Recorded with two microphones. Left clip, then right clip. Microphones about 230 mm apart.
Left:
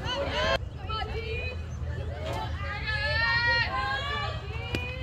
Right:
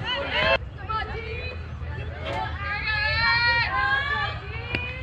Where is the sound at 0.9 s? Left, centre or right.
Right.